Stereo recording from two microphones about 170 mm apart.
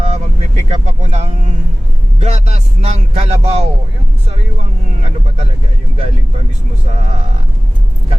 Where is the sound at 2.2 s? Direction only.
40° right (ahead or behind).